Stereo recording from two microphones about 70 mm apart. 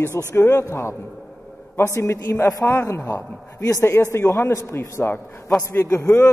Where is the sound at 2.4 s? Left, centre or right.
Left.